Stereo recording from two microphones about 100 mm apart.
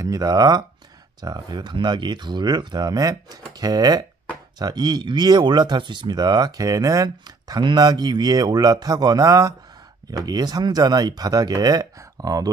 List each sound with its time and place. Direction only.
0.0 s speech: 40° right (ahead or behind)